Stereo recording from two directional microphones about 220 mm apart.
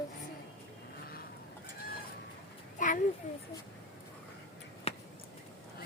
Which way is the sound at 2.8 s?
35° left (ahead or behind).